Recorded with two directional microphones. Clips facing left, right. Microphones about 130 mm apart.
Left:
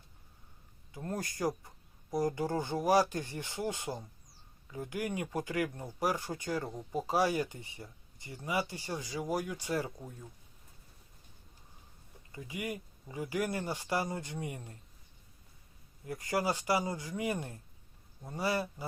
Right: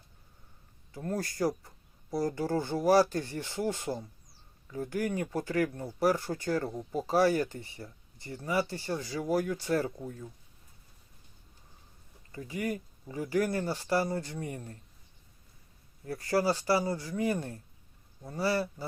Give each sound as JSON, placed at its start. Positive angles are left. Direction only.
{"t": 0.9, "sound": "speech", "side_deg": 15}
{"t": 12.6, "sound": "speech", "side_deg": 15}
{"t": 16.0, "sound": "speech", "side_deg": 15}